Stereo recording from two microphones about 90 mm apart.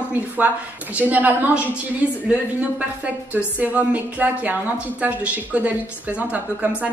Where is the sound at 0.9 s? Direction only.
20° right (ahead or behind).